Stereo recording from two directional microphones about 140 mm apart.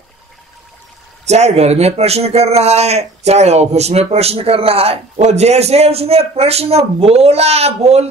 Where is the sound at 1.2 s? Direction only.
55° right (ahead or behind).